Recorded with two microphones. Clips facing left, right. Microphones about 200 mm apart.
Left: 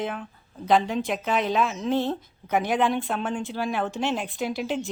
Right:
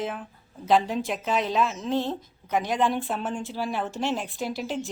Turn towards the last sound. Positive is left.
turn(degrees=0)  # may be behind; listen again after turning